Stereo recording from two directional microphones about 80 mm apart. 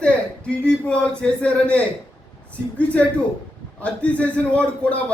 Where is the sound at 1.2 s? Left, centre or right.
Centre.